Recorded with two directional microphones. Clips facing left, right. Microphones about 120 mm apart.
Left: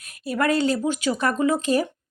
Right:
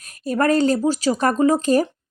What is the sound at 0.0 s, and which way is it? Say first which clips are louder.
Speech: right 4 dB; 40° right (ahead or behind).